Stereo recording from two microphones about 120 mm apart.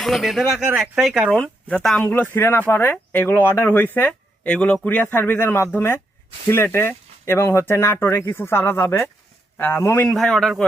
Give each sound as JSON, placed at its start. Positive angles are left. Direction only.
{"t": 0.0, "sound": "speech", "side_deg": 0}
{"t": 1.4, "sound": "speech", "side_deg": 10}
{"t": 10.1, "sound": "speech", "side_deg": 5}